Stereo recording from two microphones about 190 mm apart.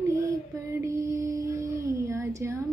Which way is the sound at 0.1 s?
15° right (ahead or behind).